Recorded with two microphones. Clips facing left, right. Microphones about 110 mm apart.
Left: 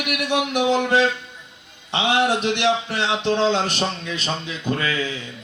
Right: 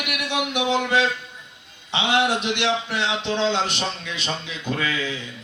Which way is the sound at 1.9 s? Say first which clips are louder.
Left 2 dB; 45° left (ahead or behind).